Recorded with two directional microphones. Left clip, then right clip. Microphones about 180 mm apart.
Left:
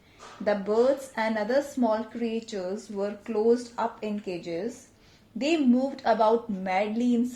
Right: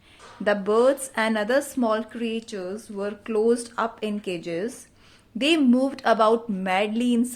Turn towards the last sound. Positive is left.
turn(degrees=-35)  # may be behind; listen again after turning